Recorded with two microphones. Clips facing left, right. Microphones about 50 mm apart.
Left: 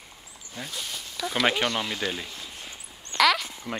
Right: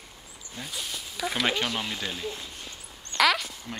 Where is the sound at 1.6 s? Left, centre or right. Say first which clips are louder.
Left 3 dB; centre.